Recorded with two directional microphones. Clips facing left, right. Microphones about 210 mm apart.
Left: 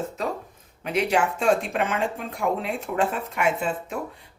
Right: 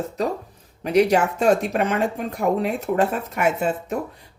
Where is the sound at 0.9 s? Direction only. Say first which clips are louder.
Right 6 dB; 40° right (ahead or behind).